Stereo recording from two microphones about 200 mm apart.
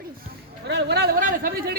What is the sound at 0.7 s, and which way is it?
Speech, 60° right (ahead or behind).